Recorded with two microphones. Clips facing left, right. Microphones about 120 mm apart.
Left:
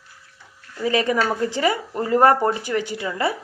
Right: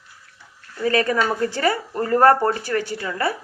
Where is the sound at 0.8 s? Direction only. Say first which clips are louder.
Right 1 dB; 20° left (ahead or behind).